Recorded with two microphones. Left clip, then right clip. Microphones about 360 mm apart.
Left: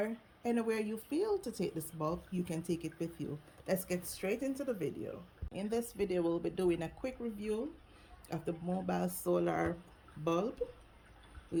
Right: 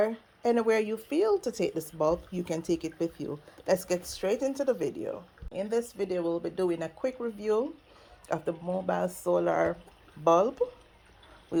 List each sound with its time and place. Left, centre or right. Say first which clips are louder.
0.0 s speech: right 10 dB; centre